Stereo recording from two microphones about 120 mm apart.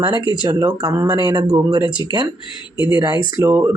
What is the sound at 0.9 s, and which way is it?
Speech, 25° right (ahead or behind).